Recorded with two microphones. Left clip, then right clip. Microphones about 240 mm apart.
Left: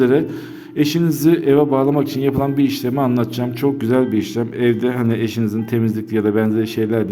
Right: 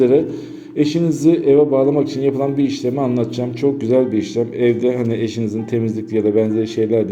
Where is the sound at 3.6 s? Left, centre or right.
Left.